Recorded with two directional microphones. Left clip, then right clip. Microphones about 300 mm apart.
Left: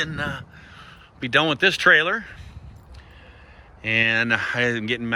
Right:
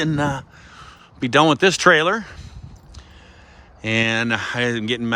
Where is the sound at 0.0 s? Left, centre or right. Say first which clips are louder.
Right 5 dB; right.